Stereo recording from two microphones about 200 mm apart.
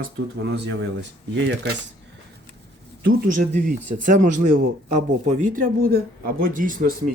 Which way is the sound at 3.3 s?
40° right (ahead or behind).